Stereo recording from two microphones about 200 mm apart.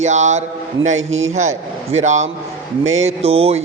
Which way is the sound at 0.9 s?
80° right.